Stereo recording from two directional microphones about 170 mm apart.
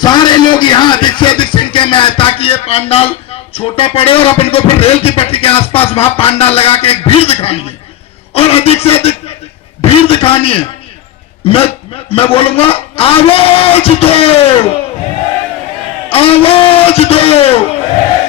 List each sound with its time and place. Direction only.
0.0 s a man's voice: 25° left (ahead or behind)
16.0 s a man's voice: 35° left (ahead or behind)